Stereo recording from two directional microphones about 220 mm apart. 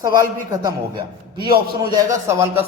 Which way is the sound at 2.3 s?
10° right (ahead or behind).